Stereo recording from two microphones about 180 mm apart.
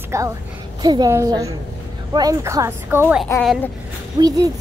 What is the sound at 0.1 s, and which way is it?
A child's voice, 15° right (ahead or behind).